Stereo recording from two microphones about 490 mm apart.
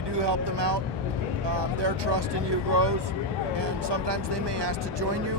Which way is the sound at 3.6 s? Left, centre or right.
Right.